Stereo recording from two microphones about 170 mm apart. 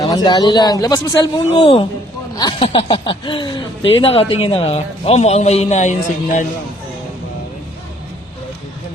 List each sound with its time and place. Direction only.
0.0 s speech: 25° left (ahead or behind); by 6.4 s 45° left (ahead or behind)